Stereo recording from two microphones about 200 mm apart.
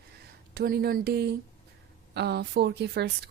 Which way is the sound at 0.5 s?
50° right (ahead or behind).